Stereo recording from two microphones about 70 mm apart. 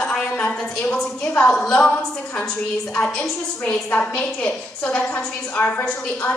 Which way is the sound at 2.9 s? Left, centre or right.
Left.